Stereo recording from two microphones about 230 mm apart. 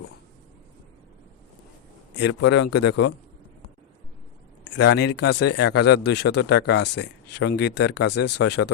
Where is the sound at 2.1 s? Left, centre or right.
Left.